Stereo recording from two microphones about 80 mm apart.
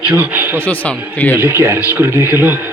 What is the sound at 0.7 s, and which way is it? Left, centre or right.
Speech, centre.